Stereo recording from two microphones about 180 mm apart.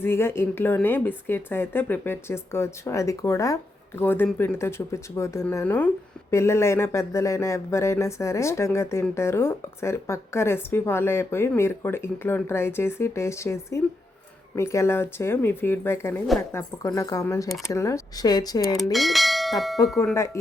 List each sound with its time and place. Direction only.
0.0 s speech: 15° left (ahead or behind)
18.8 s bell: centre (ahead or behind)
20.1 s speech: 15° left (ahead or behind)